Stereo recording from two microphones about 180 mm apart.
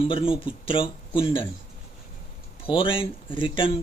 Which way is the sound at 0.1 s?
30° left (ahead or behind).